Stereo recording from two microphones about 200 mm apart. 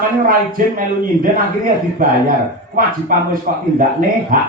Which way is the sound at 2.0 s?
45° right (ahead or behind).